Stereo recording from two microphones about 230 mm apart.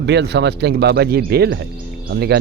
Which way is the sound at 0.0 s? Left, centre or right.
Right.